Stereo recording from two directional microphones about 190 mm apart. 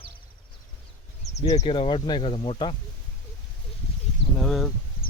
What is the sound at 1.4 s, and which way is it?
Speech, 35° left (ahead or behind).